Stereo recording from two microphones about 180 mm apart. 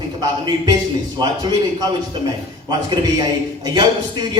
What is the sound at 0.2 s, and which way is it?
A man's voice, 20° right (ahead or behind).